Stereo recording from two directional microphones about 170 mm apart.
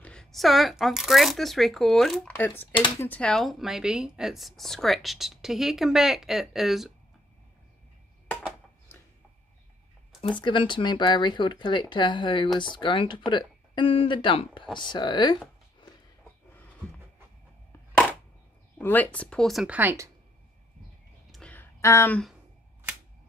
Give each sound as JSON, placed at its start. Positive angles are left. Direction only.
{"t": 0.0, "sound": "speech", "side_deg": 5}
{"t": 10.4, "sound": "speech", "side_deg": 30}
{"t": 18.8, "sound": "speech", "side_deg": 10}
{"t": 21.3, "sound": "a sound", "side_deg": 5}